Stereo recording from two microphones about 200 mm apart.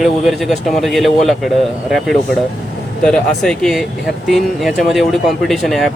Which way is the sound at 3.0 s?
5° left (ahead or behind).